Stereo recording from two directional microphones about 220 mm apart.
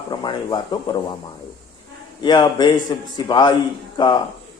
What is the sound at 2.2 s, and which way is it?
Speech, 20° left (ahead or behind).